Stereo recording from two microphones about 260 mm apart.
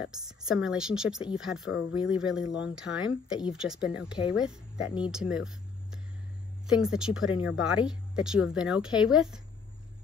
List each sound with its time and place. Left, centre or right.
0.1 s speech: centre
4.7 s speech: left
5.0 s speech: centre